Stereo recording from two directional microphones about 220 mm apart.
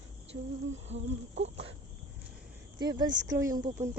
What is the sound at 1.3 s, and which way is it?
Insect, 55° right (ahead or behind).